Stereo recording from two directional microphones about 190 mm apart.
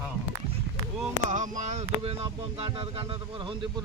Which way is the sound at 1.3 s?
40° right (ahead or behind).